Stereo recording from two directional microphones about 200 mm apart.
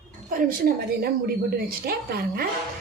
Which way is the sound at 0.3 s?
45° right (ahead or behind).